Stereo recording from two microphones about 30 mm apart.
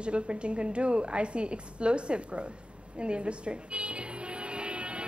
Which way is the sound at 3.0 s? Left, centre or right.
Right.